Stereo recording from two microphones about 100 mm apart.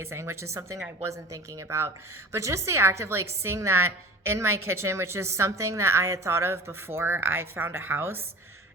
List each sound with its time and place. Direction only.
0.0 s a woman's voice: 25° right (ahead or behind)